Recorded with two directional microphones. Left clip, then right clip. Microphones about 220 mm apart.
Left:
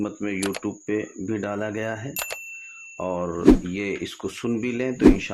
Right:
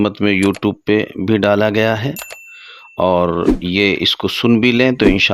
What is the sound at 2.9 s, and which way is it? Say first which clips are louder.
Speech: right 14 dB; 45° right (ahead or behind).